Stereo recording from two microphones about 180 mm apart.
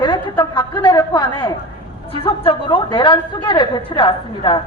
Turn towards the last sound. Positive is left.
turn(degrees=30)  # may be behind; listen again after turning